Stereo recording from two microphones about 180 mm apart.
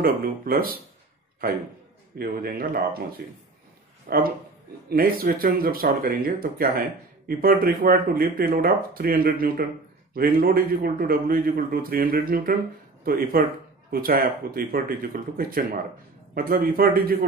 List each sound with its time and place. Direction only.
0.0 s a man's voice: 55° right (ahead or behind)
2.1 s a man's voice: 55° right (ahead or behind)